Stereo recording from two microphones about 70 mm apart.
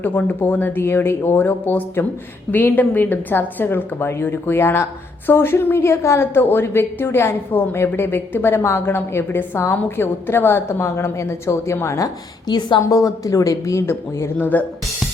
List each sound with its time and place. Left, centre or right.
0.0 s a woman's voice: left
11.9 s a woman's voice: left
12.8 s speech: left
14.3 s speech: left